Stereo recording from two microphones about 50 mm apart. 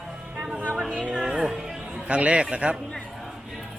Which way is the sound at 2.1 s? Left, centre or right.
Right.